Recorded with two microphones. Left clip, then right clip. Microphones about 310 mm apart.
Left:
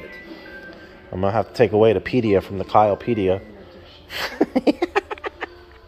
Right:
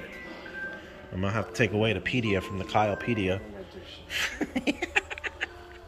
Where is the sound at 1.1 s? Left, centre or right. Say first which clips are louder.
Left 10 dB; centre.